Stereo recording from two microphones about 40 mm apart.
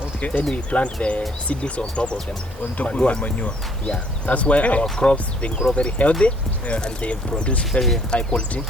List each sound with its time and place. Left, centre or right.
0.2 s speech: left
7.6 s speech: centre
8.1 s speech: left